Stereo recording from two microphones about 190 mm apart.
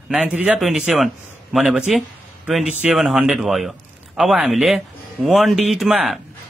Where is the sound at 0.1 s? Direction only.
5° right (ahead or behind).